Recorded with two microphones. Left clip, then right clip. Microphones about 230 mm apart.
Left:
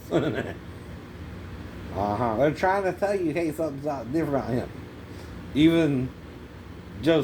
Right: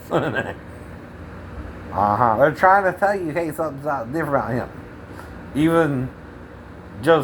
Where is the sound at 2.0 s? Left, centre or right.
Centre.